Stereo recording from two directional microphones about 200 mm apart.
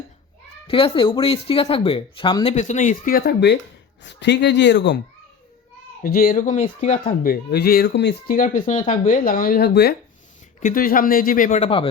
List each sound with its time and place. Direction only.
0.7 s speech: 25° left (ahead or behind); by 4.9 s 60° left (ahead or behind)
6.0 s speech: 45° left (ahead or behind)
8.4 s speech: 40° left (ahead or behind)
10.6 s speech: 45° left (ahead or behind)